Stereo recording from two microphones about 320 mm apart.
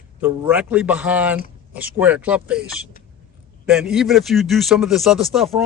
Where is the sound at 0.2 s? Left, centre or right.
Centre.